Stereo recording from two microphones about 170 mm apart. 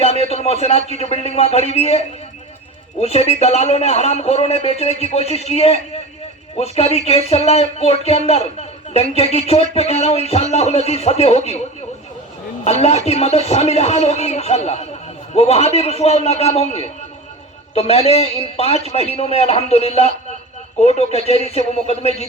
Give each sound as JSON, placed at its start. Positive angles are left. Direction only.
{"t": 0.0, "sound": "a sound", "side_deg": 40}
{"t": 0.4, "sound": "a man's voice", "side_deg": 35}
{"t": 13.1, "sound": "speech", "side_deg": 40}